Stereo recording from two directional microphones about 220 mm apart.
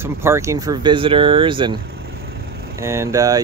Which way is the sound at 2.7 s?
15° right (ahead or behind).